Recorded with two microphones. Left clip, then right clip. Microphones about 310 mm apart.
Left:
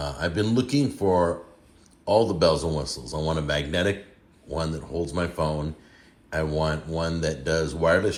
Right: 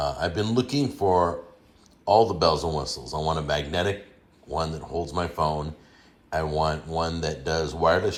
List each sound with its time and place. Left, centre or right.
0.0 s speech: centre